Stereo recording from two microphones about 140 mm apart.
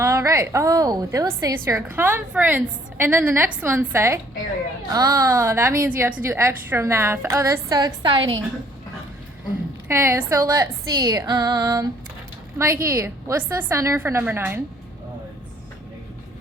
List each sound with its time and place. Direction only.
0.0 s a woman's voice: 20° right (ahead or behind); by 8.4 s 35° right (ahead or behind)
9.9 s a woman's voice: 20° right (ahead or behind)